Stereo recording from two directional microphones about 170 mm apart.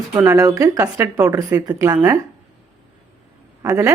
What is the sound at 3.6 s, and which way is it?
Speech, 15° right (ahead or behind).